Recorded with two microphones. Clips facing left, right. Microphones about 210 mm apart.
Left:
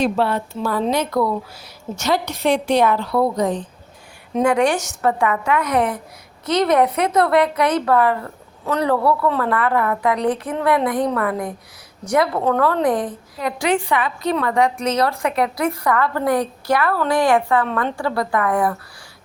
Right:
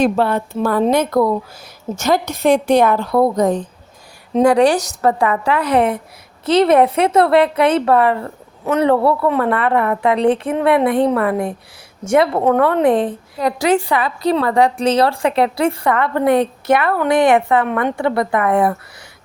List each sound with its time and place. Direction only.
0.0 s a woman's voice: 50° right (ahead or behind)
4.4 s a woman's voice: 35° right (ahead or behind)